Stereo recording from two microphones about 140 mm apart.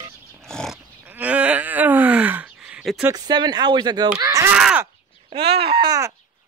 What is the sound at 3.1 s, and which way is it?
Speech, 30° right (ahead or behind).